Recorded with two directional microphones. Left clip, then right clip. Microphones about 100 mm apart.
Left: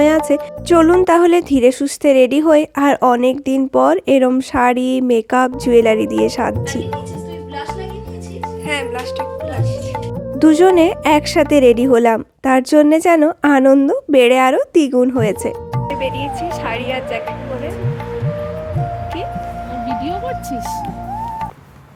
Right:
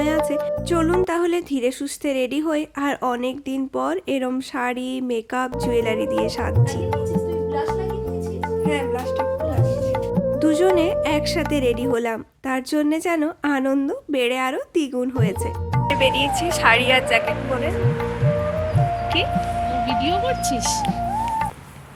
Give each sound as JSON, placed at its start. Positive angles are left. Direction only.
{"t": 0.7, "sound": "a woman's voice", "side_deg": 55}
{"t": 10.4, "sound": "a woman's voice", "side_deg": 55}
{"t": 15.9, "sound": "speech", "side_deg": 0}